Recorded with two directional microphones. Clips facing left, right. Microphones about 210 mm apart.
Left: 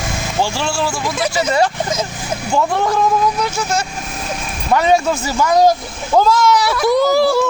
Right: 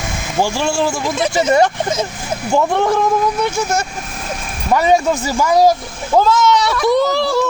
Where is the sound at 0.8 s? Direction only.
20° right (ahead or behind).